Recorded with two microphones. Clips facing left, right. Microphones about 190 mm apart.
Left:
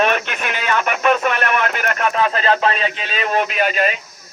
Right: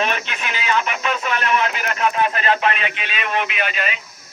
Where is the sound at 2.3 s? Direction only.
35° left (ahead or behind).